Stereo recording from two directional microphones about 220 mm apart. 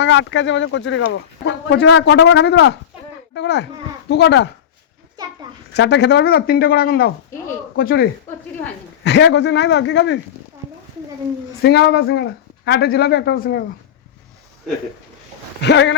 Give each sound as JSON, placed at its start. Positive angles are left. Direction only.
{"t": 0.0, "sound": "speech", "side_deg": 55}
{"t": 5.7, "sound": "speech", "side_deg": 50}
{"t": 11.6, "sound": "speech", "side_deg": 50}
{"t": 15.6, "sound": "speech", "side_deg": 55}